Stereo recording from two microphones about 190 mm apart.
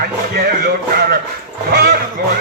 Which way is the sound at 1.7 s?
50° right (ahead or behind).